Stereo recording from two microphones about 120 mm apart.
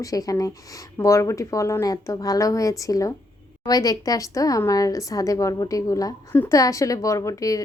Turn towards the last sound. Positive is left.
turn(degrees=30)  # may be behind; listen again after turning